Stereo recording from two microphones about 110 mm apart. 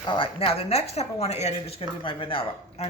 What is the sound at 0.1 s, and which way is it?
Speech, 55° left (ahead or behind).